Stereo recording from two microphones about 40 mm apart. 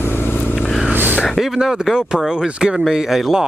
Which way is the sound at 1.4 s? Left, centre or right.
Centre.